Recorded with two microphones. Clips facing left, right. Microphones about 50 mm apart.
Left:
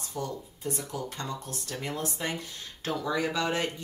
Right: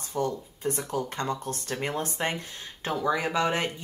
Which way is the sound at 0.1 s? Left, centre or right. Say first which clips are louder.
Right 6 dB; right.